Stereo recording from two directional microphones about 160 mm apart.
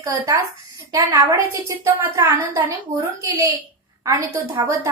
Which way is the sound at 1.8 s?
20° right (ahead or behind).